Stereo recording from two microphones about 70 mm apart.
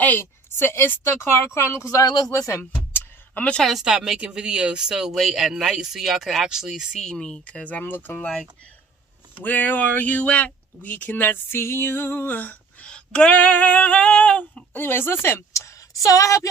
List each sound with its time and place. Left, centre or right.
0.0 s speech: left
2.0 s speech: left
2.6 s a sound: left
3.7 s speech: centre
7.0 s speech: centre
14.7 s speech: left
15.5 s a sound: left